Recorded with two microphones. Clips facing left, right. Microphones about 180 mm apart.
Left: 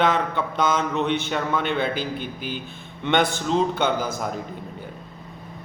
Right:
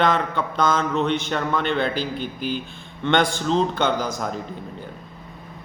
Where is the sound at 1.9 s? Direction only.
50° left (ahead or behind).